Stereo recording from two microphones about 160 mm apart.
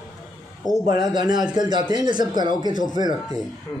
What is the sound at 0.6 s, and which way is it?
Speech, 25° left (ahead or behind).